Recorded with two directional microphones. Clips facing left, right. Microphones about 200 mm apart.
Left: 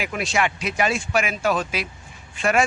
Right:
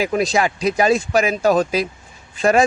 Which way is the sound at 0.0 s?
35° right (ahead or behind).